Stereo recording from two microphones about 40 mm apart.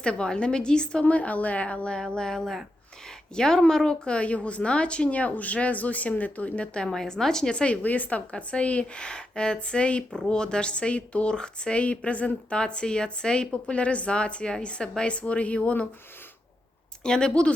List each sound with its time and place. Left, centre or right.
0.0 s a woman's voice: left
1.0 s speech: left
2.0 s a woman's voice: centre; by 6.7 s left
6.8 s a woman's voice: centre
7.5 s a woman's voice: left
7.8 s speech: left
8.3 s a woman's voice: left
17.0 s a woman's voice: left